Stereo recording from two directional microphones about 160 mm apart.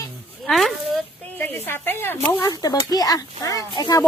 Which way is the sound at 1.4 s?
15° left (ahead or behind).